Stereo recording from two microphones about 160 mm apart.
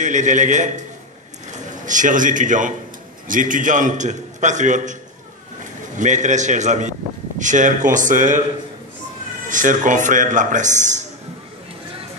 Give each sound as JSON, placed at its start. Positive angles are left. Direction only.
{"t": 0.0, "sound": "a man's voice", "side_deg": -50}
{"t": 1.9, "sound": "a man's voice", "side_deg": -55}
{"t": 9.5, "sound": "a man's voice", "side_deg": -55}